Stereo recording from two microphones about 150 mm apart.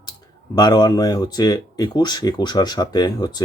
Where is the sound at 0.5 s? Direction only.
25° left (ahead or behind).